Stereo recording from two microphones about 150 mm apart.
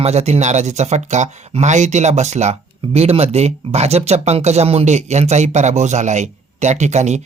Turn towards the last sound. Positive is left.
turn(degrees=-50)  # may be behind; listen again after turning